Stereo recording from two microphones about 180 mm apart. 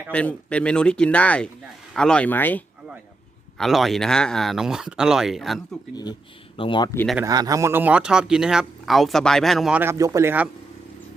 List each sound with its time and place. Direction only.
0.1 s speech: 5° left (ahead or behind)
5.9 s speech: 20° left (ahead or behind)
6.9 s speech: 10° left (ahead or behind)
7.3 s speech: 20° right (ahead or behind)